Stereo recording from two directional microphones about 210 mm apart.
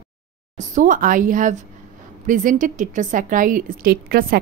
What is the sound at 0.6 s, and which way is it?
A woman's voice, 35° right (ahead or behind).